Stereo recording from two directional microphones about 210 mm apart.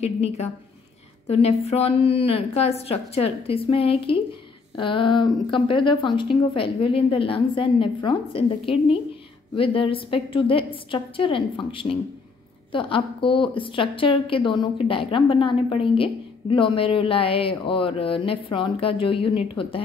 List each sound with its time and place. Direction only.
0.0 s a woman's voice: 30° left (ahead or behind)